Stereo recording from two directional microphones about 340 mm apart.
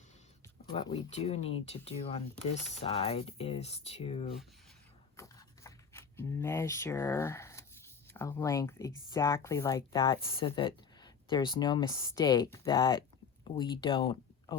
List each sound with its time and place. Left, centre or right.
0.8 s speech: centre
5.1 s a sound: centre
8.1 s speech: centre